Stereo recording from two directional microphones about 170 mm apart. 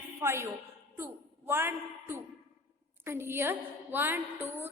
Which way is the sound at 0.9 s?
15° right (ahead or behind).